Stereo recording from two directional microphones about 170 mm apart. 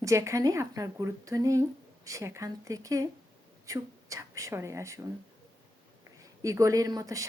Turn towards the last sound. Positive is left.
turn(degrees=-20)  # may be behind; listen again after turning